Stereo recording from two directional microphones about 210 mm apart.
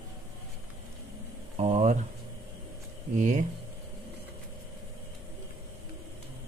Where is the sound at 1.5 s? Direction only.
30° right (ahead or behind).